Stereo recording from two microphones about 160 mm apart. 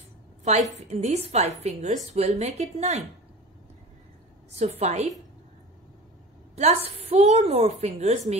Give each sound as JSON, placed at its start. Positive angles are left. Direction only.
{"t": 0.4, "sound": "a woman's voice", "side_deg": -45}
{"t": 4.5, "sound": "a woman's voice", "side_deg": -40}
{"t": 6.5, "sound": "a woman's voice", "side_deg": -40}